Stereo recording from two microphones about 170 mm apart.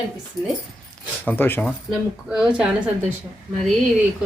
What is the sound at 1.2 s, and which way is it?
Speech, 10° left (ahead or behind).